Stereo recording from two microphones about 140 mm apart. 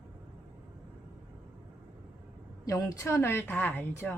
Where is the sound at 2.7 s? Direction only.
25° left (ahead or behind).